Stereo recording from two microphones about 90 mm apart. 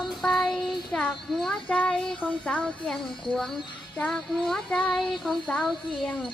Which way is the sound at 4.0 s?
5° left (ahead or behind).